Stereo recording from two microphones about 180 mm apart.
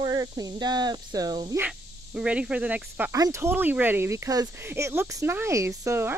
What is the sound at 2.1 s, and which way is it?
Speech, 5° right (ahead or behind).